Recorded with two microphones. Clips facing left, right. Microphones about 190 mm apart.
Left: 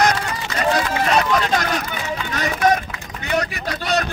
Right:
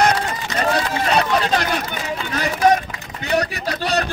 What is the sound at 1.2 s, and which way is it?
A man's voice, 30° right (ahead or behind).